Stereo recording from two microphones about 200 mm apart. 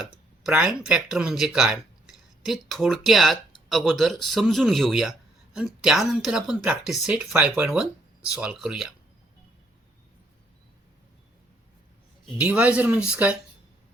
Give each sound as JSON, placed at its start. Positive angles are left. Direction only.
{"t": 0.0, "sound": "speech", "side_deg": -5}
{"t": 12.4, "sound": "speech", "side_deg": -5}